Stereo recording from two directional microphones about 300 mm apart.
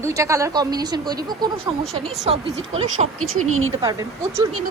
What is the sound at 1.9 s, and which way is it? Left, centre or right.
Speech, centre.